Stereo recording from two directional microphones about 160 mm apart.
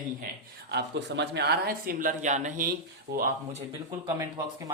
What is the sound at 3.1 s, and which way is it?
Speech, 90° right.